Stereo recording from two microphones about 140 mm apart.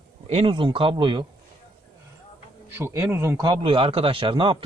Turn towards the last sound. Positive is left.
turn(degrees=-35)  # may be behind; listen again after turning